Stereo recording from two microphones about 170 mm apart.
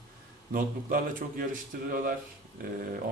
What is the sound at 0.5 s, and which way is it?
A man's voice, 55° right (ahead or behind).